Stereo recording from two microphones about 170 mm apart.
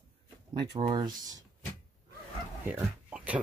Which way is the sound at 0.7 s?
30° right (ahead or behind).